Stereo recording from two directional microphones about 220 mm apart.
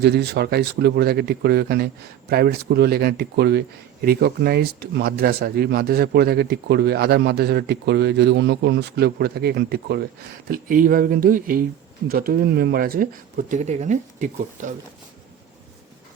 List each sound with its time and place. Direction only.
0.0 s speech: 50° right (ahead or behind)